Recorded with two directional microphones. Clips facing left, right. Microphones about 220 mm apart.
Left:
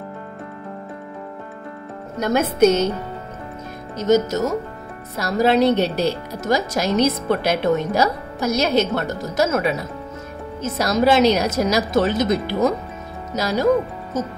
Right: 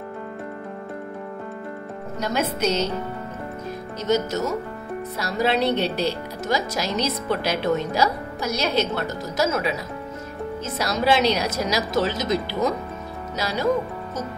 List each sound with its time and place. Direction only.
2.1 s speech: 50° left (ahead or behind)
4.0 s speech: 45° left (ahead or behind)
13.4 s speech: 45° left (ahead or behind)